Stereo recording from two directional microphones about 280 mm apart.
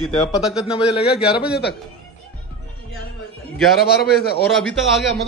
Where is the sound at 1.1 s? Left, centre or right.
Left.